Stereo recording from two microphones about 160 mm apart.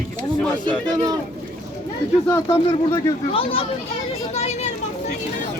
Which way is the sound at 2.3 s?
15° left (ahead or behind).